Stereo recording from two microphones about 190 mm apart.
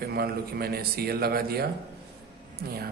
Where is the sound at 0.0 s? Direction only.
55° right (ahead or behind).